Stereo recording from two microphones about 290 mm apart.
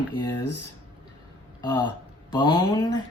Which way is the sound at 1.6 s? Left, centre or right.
Centre.